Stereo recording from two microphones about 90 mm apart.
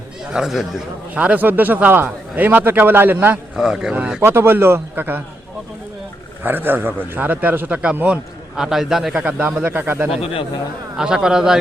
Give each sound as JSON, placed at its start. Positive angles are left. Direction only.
{"t": 0.3, "sound": "speech", "side_deg": 0}
{"t": 1.1, "sound": "a man's voice", "side_deg": -15}
{"t": 3.5, "sound": "a man's voice", "side_deg": -5}
{"t": 4.2, "sound": "a man's voice", "side_deg": -25}
{"t": 6.4, "sound": "a man's voice", "side_deg": -20}
{"t": 9.2, "sound": "a man's voice", "side_deg": -15}
{"t": 10.9, "sound": "a man's voice", "side_deg": -5}